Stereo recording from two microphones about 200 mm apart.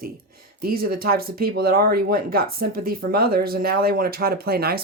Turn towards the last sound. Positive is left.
turn(degrees=-50)  # may be behind; listen again after turning